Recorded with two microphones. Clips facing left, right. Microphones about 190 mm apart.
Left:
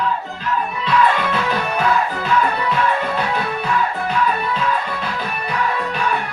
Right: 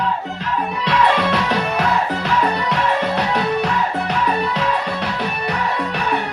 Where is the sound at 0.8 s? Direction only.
80° right.